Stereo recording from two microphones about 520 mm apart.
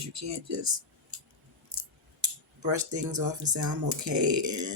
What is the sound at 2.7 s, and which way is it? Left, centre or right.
Speech, right.